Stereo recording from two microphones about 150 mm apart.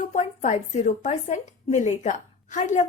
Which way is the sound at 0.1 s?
55° left (ahead or behind).